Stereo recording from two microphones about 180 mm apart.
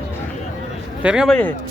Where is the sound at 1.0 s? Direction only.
5° right (ahead or behind).